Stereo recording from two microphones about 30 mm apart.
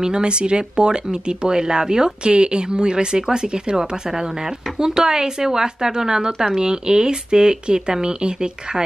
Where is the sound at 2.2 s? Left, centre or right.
Right.